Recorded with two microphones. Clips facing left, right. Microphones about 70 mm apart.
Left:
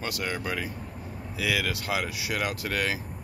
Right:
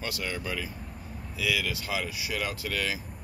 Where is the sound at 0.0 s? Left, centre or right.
Left.